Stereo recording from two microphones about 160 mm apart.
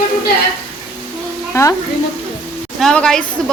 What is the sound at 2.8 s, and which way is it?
Speech, 5° left (ahead or behind).